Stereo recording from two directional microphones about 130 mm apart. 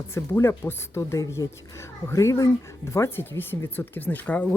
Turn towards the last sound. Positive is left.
turn(degrees=10)  # may be behind; listen again after turning